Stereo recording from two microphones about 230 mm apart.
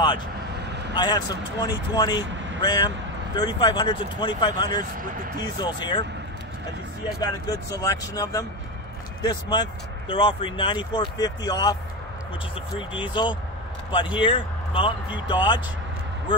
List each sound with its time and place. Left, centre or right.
0.9 s speech: centre
2.2 s vehicle: right
2.6 s speech: centre
7.2 s speech: centre
12.7 s speech: left